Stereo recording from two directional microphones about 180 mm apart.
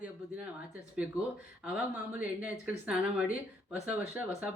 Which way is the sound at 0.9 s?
5° right (ahead or behind).